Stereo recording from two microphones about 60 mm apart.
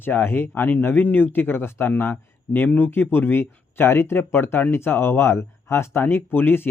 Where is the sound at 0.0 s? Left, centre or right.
Left.